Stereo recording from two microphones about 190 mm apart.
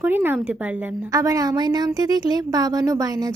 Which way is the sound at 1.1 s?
20° right (ahead or behind).